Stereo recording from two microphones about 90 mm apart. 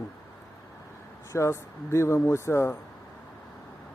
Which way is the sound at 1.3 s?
35° left (ahead or behind).